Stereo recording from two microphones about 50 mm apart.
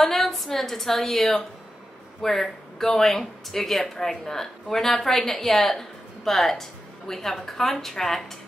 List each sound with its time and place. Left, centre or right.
0.0 s a woman's voice: centre